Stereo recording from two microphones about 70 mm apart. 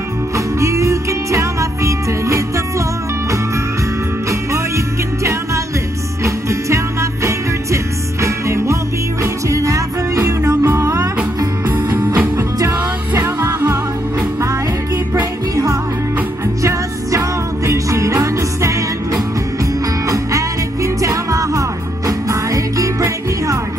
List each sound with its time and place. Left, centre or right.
0.6 s music: right
4.3 s music: right
11.6 s music: right
13.1 s music: right
15.5 s music: right
17.6 s music: right
20.1 s music: right